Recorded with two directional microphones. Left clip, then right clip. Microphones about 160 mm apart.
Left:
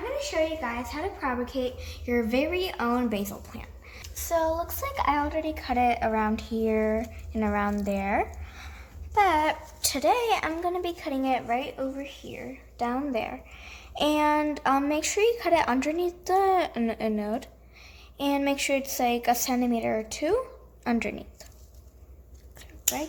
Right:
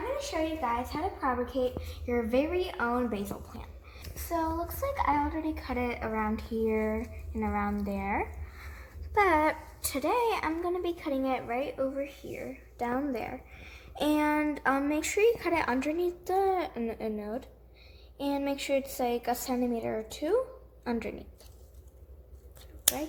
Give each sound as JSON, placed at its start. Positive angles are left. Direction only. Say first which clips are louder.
{"t": 0.2, "sound": "a woman's voice", "louder": "left 4 dB", "side_deg": 10}
{"t": 1.2, "sound": "a woman's voice", "louder": "even", "side_deg": 25}
{"t": 7.4, "sound": "a woman's voice", "louder": "left 5 dB", "side_deg": 40}
{"t": 9.1, "sound": "a woman's voice", "louder": "left 3 dB", "side_deg": 10}
{"t": 9.8, "sound": "a woman's voice", "louder": "left 4 dB", "side_deg": 25}